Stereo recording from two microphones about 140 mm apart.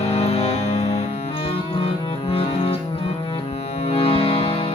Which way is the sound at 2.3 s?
45° left (ahead or behind).